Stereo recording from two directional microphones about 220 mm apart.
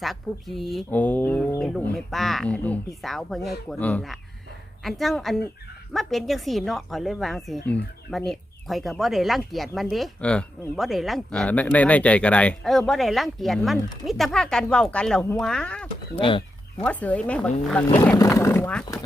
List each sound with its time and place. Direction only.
0.0 s speech: centre (ahead or behind)
16.1 s speech: 20° left (ahead or behind)
16.8 s speech: 5° left (ahead or behind)
17.8 s speech: 15° left (ahead or behind)